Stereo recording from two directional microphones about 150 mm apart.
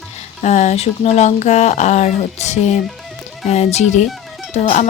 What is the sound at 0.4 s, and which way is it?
Speech, 50° left (ahead or behind).